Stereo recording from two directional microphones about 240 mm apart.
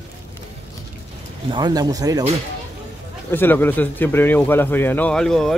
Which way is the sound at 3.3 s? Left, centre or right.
Centre.